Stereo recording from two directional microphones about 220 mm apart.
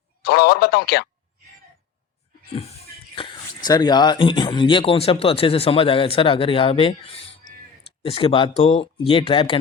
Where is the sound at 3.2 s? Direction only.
20° left (ahead or behind).